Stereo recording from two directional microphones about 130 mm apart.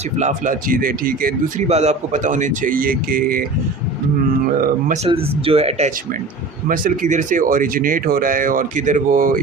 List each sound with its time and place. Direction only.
0.2 s a man's voice: 75° right (ahead or behind)
5.0 s speech: 45° right (ahead or behind)
6.7 s speech: 90° right